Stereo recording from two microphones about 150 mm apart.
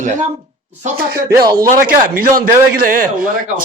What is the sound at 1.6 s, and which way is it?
A man's voice, 75° right (ahead or behind).